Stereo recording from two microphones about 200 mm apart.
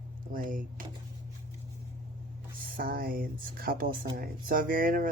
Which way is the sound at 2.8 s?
45° right (ahead or behind).